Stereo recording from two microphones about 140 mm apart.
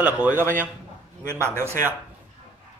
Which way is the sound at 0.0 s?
10° right (ahead or behind).